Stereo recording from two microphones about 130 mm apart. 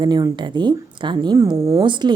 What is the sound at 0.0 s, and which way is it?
A woman's voice, 35° right (ahead or behind).